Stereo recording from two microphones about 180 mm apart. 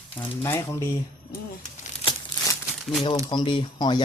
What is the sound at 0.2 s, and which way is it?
Speech, 15° left (ahead or behind).